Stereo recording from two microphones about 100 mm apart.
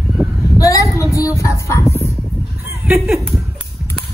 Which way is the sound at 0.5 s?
35° left (ahead or behind).